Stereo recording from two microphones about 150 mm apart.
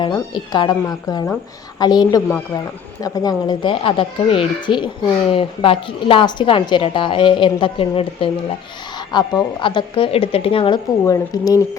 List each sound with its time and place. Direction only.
0.1 s a woman's voice: 30° left (ahead or behind)
11.0 s speech: 25° left (ahead or behind)